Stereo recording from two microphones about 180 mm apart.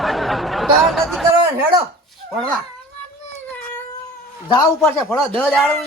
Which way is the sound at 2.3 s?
5° left (ahead or behind).